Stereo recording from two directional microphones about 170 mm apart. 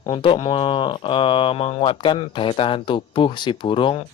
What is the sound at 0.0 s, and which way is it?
Speech, 30° left (ahead or behind).